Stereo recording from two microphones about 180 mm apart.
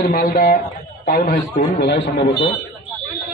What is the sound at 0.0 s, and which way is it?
Speech, 55° left (ahead or behind).